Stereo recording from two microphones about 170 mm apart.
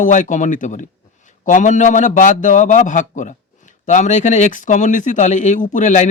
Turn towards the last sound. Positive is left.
turn(degrees=45)  # may be behind; listen again after turning